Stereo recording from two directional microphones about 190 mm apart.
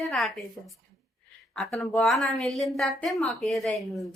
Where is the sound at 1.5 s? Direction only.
Centre (ahead or behind).